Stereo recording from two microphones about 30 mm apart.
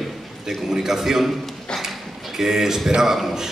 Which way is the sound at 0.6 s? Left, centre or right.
Centre.